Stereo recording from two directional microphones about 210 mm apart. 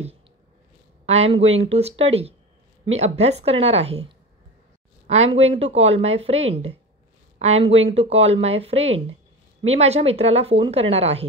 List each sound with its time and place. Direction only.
1.0 s speech: 30° right (ahead or behind)
5.0 s speech: 30° right (ahead or behind)